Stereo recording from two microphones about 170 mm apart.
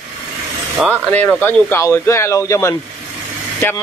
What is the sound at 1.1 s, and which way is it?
Speech, 10° left (ahead or behind).